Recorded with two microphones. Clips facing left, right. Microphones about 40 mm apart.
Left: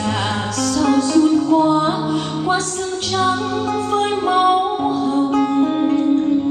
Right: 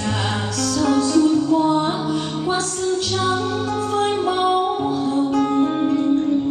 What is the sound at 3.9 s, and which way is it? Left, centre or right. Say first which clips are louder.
Music: left 3 dB; left.